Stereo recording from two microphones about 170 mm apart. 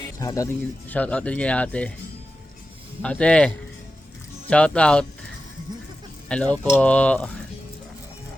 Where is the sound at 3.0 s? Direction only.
5° left (ahead or behind).